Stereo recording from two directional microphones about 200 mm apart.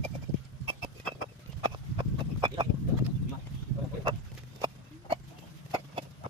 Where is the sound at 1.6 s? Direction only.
25° right (ahead or behind).